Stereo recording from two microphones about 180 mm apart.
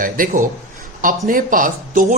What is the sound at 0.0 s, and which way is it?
Speech, 50° right (ahead or behind).